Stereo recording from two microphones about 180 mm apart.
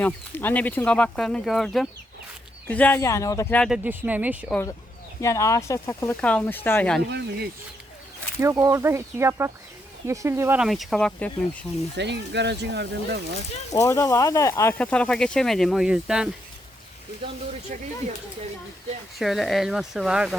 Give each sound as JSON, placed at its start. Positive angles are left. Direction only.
{"t": 0.0, "sound": "speech", "side_deg": 10}
{"t": 3.8, "sound": "speech", "side_deg": -10}
{"t": 5.2, "sound": "speech", "side_deg": 15}
{"t": 7.1, "sound": "speech", "side_deg": -65}
{"t": 8.4, "sound": "speech", "side_deg": -15}
{"t": 10.6, "sound": "speech", "side_deg": 0}
{"t": 11.9, "sound": "speech", "side_deg": -70}
{"t": 13.7, "sound": "speech", "side_deg": 15}
{"t": 19.2, "sound": "speech", "side_deg": 0}